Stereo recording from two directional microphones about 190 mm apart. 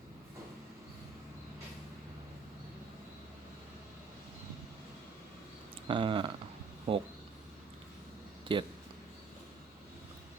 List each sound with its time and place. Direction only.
5.9 s speech: 25° right (ahead or behind)
8.5 s speech: 25° right (ahead or behind)